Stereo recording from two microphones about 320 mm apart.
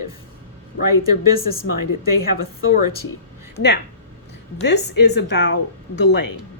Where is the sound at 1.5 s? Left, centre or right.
Left.